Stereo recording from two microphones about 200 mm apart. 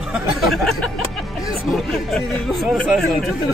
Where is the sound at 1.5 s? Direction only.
Centre (ahead or behind).